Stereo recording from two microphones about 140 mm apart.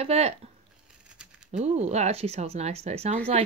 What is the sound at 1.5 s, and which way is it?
Speech, 55° right (ahead or behind).